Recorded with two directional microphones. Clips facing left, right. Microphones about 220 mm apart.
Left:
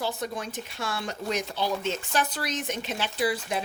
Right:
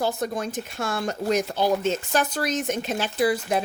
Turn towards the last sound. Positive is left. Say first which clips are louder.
# right 5 dB
turn(degrees=-45)  # may be behind; listen again after turning